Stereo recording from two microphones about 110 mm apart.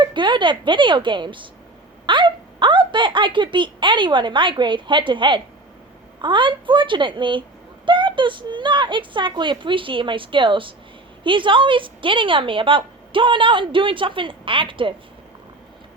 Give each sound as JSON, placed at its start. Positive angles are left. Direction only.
{"t": 0.0, "sound": "a woman's voice", "side_deg": -45}